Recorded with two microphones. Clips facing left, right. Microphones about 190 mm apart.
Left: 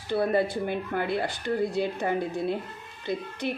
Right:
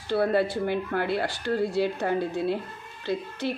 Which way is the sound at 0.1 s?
15° left (ahead or behind).